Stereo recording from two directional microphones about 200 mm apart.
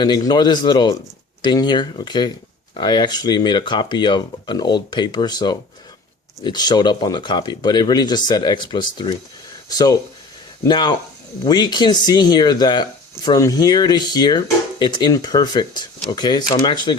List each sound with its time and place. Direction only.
0.0 s speech: 20° left (ahead or behind)